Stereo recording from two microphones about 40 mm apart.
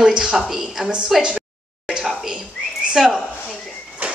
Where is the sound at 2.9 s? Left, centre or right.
Centre.